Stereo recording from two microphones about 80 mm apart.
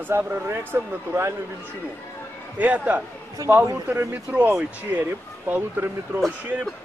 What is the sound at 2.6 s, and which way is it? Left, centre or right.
Speech, centre.